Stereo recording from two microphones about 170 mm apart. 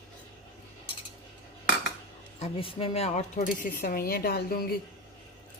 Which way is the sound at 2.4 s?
30° left (ahead or behind).